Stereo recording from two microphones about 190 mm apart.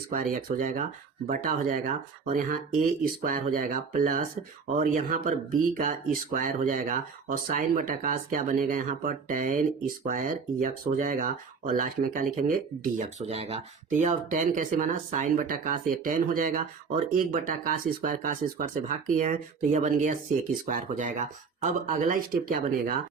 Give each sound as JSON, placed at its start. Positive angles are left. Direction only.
{"t": 0.1, "sound": "speech", "side_deg": -45}